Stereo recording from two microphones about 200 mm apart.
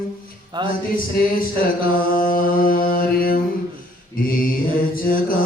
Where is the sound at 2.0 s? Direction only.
45° left (ahead or behind).